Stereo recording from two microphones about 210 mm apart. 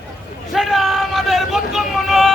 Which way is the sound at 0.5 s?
Centre (ahead or behind).